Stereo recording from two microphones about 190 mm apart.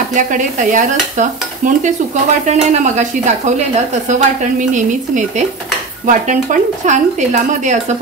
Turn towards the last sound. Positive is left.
turn(degrees=-40)  # may be behind; listen again after turning